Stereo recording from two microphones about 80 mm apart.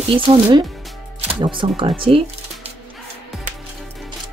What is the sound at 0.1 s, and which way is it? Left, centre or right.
Speech, right.